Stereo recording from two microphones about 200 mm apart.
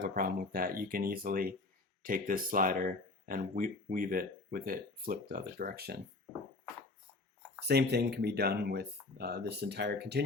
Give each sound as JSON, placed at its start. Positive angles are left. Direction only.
{"t": 0.0, "sound": "speech", "side_deg": -45}
{"t": 7.7, "sound": "speech", "side_deg": -55}